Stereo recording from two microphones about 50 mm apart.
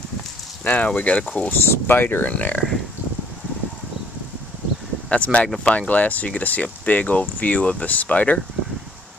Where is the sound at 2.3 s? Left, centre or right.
Left.